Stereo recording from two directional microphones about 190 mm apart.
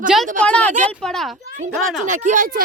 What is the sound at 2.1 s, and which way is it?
Speech, 40° right (ahead or behind).